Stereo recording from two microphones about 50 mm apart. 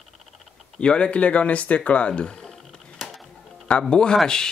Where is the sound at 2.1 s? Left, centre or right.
Centre.